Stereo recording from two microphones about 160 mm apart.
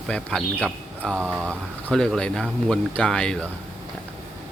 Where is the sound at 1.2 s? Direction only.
10° right (ahead or behind).